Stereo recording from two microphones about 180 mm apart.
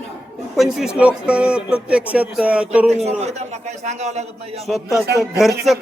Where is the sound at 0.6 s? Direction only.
5° right (ahead or behind).